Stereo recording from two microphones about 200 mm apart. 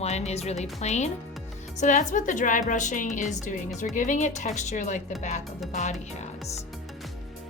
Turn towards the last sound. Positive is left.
turn(degrees=35)  # may be behind; listen again after turning